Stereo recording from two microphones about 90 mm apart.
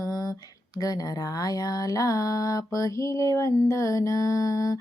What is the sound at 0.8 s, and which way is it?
Speech, 45° left (ahead or behind).